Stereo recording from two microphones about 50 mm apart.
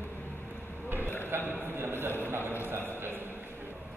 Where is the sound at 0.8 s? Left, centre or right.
Right.